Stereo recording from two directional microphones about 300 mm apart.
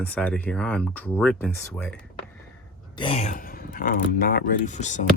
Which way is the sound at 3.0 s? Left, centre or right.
Centre.